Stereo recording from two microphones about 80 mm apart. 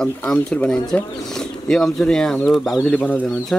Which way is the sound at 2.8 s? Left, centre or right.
Centre.